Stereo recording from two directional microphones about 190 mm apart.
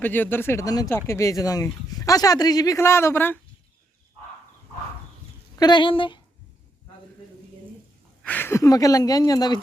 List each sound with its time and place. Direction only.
0.0 s speech: 10° left (ahead or behind)
5.5 s speech: 25° left (ahead or behind)
8.2 s speech: 10° left (ahead or behind)